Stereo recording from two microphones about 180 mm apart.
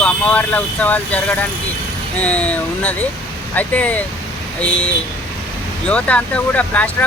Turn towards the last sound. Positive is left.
turn(degrees=10)  # may be behind; listen again after turning